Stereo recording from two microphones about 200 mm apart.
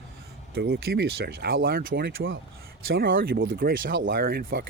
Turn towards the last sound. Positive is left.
turn(degrees=-45)  # may be behind; listen again after turning